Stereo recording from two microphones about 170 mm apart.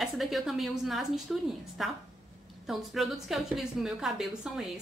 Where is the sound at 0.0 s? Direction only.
Centre (ahead or behind).